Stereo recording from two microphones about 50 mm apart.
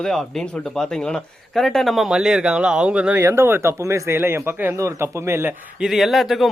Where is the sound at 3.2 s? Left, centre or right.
Right.